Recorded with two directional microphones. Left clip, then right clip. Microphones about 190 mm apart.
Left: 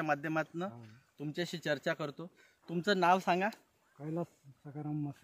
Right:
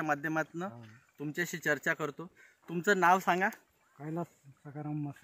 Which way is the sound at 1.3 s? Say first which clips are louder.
Right 4 dB; 40° left (ahead or behind).